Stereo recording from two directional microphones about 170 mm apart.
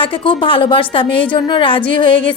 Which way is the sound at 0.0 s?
30° left (ahead or behind).